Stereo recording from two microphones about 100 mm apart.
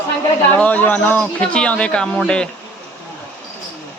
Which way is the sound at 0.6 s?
15° left (ahead or behind).